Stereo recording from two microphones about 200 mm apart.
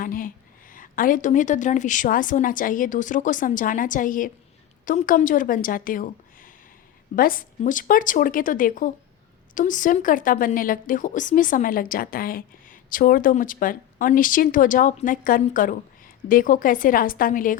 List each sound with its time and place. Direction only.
0.0 s a woman's voice: 45° left (ahead or behind)